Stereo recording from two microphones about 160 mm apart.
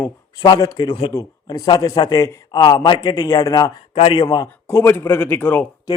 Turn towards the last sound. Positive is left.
turn(degrees=10)  # may be behind; listen again after turning